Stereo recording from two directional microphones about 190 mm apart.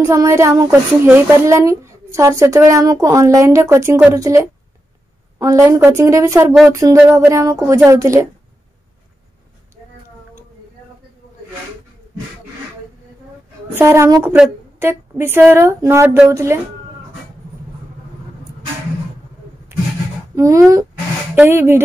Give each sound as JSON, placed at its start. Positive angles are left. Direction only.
{"t": 0.0, "sound": "a woman's voice", "side_deg": -15}
{"t": 13.7, "sound": "a woman's voice", "side_deg": -15}
{"t": 20.3, "sound": "a woman's voice", "side_deg": -15}